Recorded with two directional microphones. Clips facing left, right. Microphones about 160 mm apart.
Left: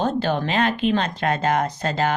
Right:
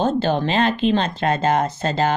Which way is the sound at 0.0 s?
30° right (ahead or behind).